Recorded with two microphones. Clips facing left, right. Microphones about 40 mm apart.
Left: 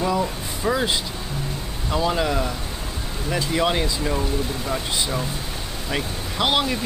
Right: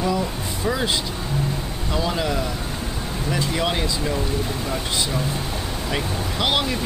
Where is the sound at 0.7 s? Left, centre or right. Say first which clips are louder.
Left 1 dB; centre.